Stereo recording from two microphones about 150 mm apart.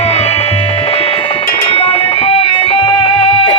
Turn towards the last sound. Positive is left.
turn(degrees=40)  # may be behind; listen again after turning